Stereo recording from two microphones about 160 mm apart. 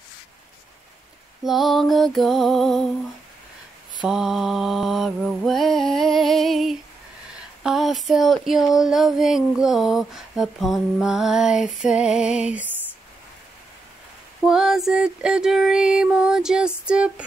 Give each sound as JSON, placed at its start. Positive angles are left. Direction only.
{"t": 1.4, "sound": "female singing", "side_deg": 0}
{"t": 4.0, "sound": "mantra", "side_deg": -5}
{"t": 7.6, "sound": "female singing", "side_deg": 0}
{"t": 14.4, "sound": "female singing", "side_deg": -5}